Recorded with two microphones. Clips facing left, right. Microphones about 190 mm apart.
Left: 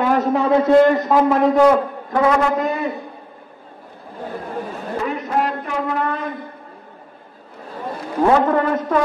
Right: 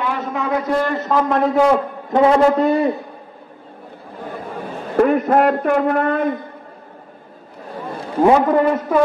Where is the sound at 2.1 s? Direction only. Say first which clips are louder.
Right 4 dB; 25° right (ahead or behind).